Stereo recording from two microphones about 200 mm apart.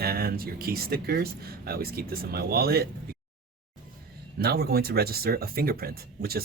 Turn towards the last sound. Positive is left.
turn(degrees=-50)  # may be behind; listen again after turning